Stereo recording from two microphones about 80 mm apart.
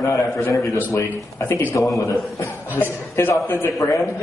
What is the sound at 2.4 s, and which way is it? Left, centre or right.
Cough, left.